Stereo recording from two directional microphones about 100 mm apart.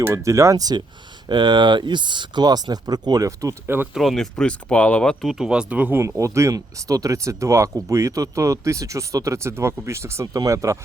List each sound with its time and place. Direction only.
0.0 s speech: 30° right (ahead or behind)
3.9 s speech: centre (ahead or behind)
5.2 s speech: 5° right (ahead or behind); by 10.8 s 35° right (ahead or behind)